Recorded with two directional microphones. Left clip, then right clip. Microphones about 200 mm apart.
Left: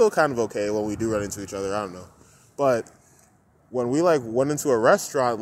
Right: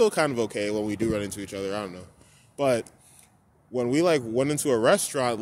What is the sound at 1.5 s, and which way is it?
Speech, 5° right (ahead or behind).